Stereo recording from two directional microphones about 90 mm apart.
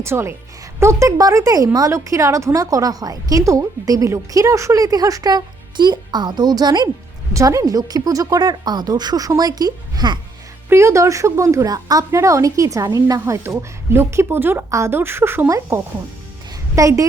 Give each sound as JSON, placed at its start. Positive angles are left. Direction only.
{"t": 0.0, "sound": "a woman's voice", "side_deg": -30}
{"t": 7.3, "sound": "a woman's voice", "side_deg": -40}
{"t": 10.7, "sound": "a woman's voice", "side_deg": -30}